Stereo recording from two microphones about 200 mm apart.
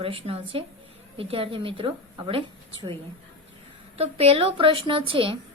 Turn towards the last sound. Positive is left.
turn(degrees=-25)  # may be behind; listen again after turning